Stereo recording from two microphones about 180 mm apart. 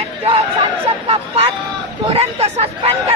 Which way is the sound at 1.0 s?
30° right (ahead or behind).